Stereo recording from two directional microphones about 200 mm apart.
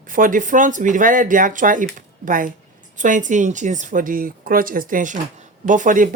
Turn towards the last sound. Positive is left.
turn(degrees=-40)  # may be behind; listen again after turning